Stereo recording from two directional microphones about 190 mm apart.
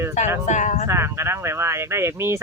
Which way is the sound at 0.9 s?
15° right (ahead or behind).